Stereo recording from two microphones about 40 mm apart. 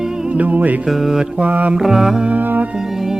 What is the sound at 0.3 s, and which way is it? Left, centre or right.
Music, right.